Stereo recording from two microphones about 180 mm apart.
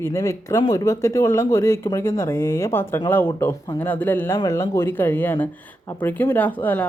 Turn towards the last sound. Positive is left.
turn(degrees=10)  # may be behind; listen again after turning